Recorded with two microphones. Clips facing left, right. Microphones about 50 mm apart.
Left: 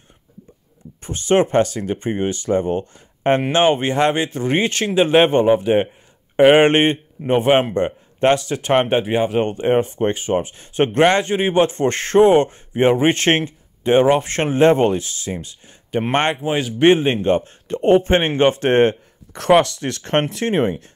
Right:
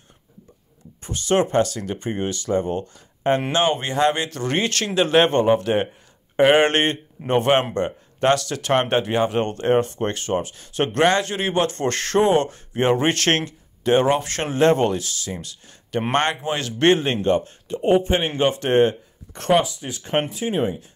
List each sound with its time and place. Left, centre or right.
1.0 s speech: left; by 5.9 s centre
6.3 s speech: left
7.7 s speech: left
16.3 s speech: centre
17.6 s speech: left
19.3 s speech: left